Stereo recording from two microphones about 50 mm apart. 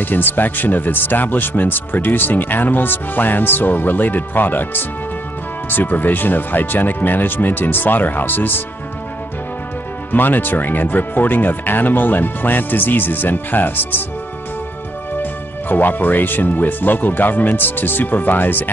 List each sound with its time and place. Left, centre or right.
0.0 s speech: left
10.1 s speech: left
15.7 s speech: left